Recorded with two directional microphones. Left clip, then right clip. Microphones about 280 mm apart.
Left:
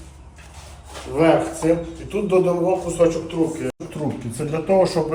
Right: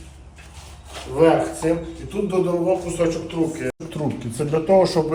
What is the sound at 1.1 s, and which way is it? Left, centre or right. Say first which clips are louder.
A man's voice: even; centre.